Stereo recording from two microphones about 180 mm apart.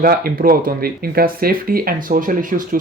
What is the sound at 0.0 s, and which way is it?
Speech, 55° right (ahead or behind).